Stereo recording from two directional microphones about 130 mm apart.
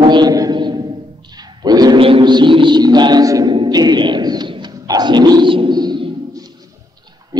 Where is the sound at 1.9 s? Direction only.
45° right (ahead or behind).